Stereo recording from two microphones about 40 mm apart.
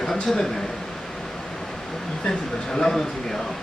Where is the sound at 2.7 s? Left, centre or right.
Centre.